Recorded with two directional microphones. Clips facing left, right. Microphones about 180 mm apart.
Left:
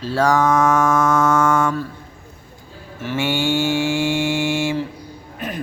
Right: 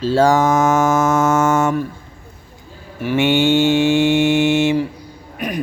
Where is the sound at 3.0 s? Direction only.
15° right (ahead or behind).